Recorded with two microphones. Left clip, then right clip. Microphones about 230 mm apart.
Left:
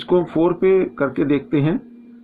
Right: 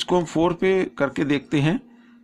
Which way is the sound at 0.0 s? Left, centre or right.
Right.